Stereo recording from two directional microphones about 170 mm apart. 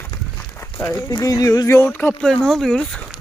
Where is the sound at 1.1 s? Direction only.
20° left (ahead or behind); by 3.0 s 5° left (ahead or behind).